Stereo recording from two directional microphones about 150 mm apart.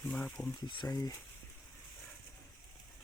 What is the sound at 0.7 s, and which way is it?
Speech, 30° left (ahead or behind).